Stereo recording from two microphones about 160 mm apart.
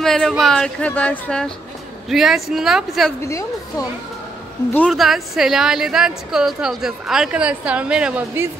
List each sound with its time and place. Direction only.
0.0 s a woman's voice: 5° left (ahead or behind)
3.2 s a woman's voice: 20° left (ahead or behind)
4.7 s a woman's voice: 5° left (ahead or behind)